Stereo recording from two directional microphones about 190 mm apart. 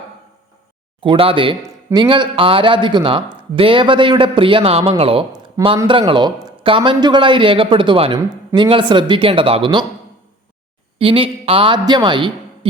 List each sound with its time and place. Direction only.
1.0 s speech: 30° right (ahead or behind)
10.9 s speech: 30° right (ahead or behind)